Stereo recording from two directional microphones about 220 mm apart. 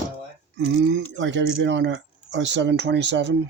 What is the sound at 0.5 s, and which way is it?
Speech, 55° right (ahead or behind).